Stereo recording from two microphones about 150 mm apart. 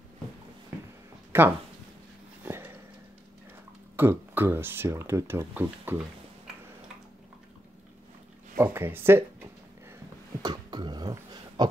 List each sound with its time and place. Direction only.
1.3 s speech: 15° right (ahead or behind)
2.4 s a sound: 15° right (ahead or behind)
3.9 s speech: 15° right (ahead or behind)
8.5 s speech: 15° right (ahead or behind)
10.4 s beatboxing: 30° right (ahead or behind)